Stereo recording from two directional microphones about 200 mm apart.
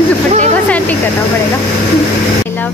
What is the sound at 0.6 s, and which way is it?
Speech, 5° left (ahead or behind).